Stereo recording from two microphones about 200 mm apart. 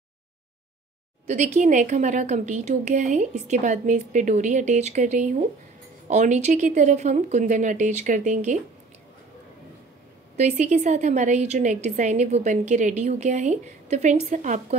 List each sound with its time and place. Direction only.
1.2 s a woman's voice: 35° right (ahead or behind)
10.3 s a woman's voice: 35° right (ahead or behind)